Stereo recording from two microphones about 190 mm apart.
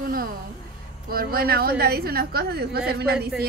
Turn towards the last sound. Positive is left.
turn(degrees=-55)  # may be behind; listen again after turning